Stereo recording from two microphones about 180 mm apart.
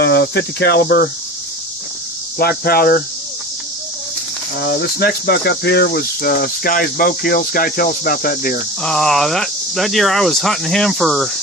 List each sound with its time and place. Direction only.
0.0 s cricket: 65° left (ahead or behind)
2.3 s speech: 55° left (ahead or behind)
4.6 s speech: 60° left (ahead or behind)
8.8 s speech: 5° left (ahead or behind)